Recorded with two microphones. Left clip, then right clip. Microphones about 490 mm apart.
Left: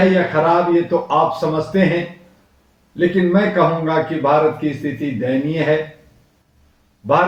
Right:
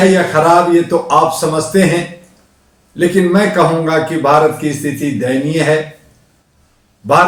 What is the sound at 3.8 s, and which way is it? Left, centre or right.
Speech, left.